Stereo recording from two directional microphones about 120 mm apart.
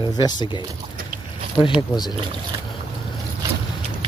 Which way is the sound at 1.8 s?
35° left (ahead or behind).